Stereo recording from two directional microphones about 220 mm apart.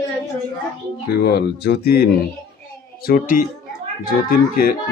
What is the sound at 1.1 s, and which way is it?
Speech, 45° left (ahead or behind).